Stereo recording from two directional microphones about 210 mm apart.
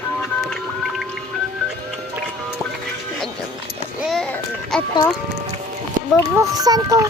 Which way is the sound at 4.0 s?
Centre (ahead or behind).